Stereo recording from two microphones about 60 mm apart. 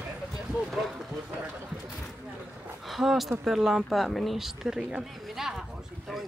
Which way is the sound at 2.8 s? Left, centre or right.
Centre.